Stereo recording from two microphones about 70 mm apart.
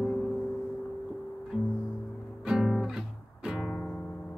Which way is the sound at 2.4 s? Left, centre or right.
Centre.